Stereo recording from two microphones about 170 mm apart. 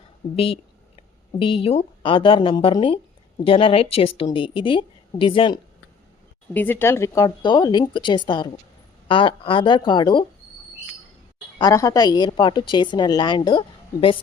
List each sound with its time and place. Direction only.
0.3 s a woman's voice: 35° left (ahead or behind)
6.5 s a woman's voice: 10° left (ahead or behind); by 10.2 s 25° left (ahead or behind)
11.5 s a woman's voice: 20° left (ahead or behind)